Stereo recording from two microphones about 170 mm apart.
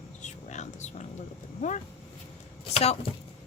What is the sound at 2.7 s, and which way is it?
Speech, 40° left (ahead or behind).